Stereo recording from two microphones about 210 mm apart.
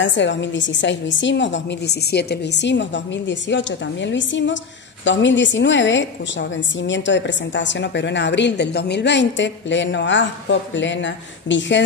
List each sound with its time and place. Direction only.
0.0 s a woman's voice: 60° left (ahead or behind)